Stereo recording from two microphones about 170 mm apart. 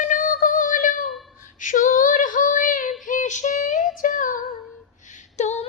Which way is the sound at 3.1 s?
45° left (ahead or behind).